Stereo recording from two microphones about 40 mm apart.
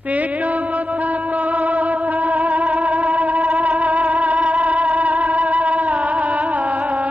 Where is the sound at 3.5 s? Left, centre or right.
Right.